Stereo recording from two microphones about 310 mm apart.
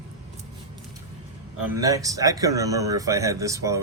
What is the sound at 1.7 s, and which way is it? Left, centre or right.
A man's voice, centre.